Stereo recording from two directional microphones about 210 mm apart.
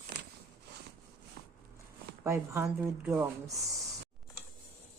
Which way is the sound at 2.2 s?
15° right (ahead or behind).